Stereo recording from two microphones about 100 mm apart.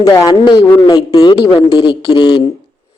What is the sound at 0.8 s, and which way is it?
A man's voice, 55° left (ahead or behind).